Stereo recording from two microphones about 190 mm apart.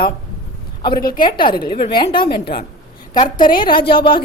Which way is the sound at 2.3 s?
55° left (ahead or behind).